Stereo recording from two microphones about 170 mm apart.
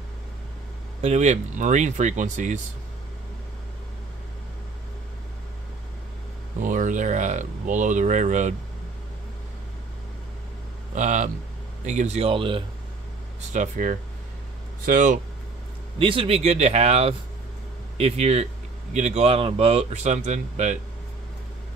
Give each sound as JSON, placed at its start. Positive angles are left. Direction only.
{"t": 1.0, "sound": "speech", "side_deg": -40}
{"t": 6.6, "sound": "speech", "side_deg": -50}
{"t": 11.0, "sound": "speech", "side_deg": -45}
{"t": 13.5, "sound": "speech", "side_deg": -50}
{"t": 16.0, "sound": "speech", "side_deg": -30}